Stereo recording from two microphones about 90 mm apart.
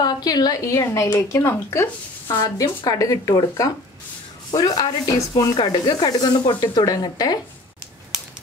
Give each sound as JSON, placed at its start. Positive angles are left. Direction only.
{"t": 0.0, "sound": "a woman's voice", "side_deg": 45}
{"t": 2.2, "sound": "speech", "side_deg": 40}
{"t": 5.6, "sound": "speech", "side_deg": 55}